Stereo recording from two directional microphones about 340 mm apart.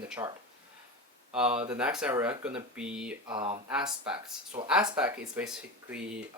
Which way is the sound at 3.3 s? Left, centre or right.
Centre.